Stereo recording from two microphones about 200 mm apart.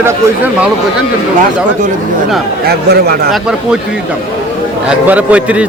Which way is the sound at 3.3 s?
5° right (ahead or behind).